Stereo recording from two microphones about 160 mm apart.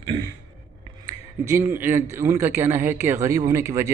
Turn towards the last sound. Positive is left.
turn(degrees=-15)  # may be behind; listen again after turning